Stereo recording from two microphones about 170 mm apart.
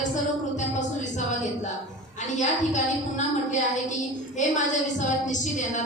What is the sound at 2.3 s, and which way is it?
Speech, 45° left (ahead or behind).